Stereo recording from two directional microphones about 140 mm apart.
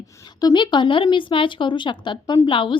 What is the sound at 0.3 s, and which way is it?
A woman's voice, 30° left (ahead or behind).